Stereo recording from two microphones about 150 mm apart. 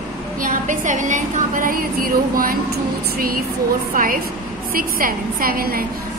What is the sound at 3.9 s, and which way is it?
A woman's voice, 65° right (ahead or behind).